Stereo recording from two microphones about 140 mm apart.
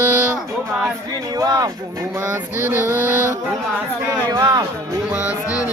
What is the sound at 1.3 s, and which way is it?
Speech, 25° right (ahead or behind).